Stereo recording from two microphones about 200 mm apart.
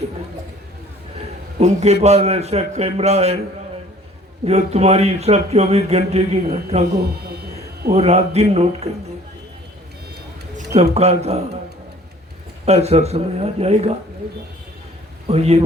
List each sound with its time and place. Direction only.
1.5 s speech: 35° right (ahead or behind)
4.4 s speech: 30° right (ahead or behind)
6.9 s speech: 50° right (ahead or behind)
7.9 s speech: 30° right (ahead or behind)
10.9 s speech: 30° right (ahead or behind)
12.6 s speech: 30° right (ahead or behind)
15.3 s speech: 30° right (ahead or behind)